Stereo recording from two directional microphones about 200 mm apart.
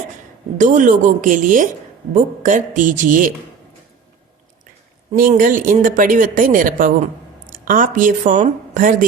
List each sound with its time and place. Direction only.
0.6 s speech: 40° right (ahead or behind)
5.1 s speech: 45° right (ahead or behind)